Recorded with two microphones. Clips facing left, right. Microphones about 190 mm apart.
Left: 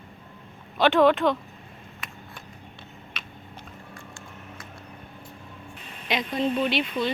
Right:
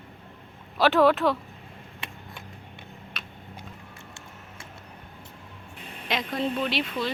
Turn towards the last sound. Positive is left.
turn(degrees=0)  # may be behind; listen again after turning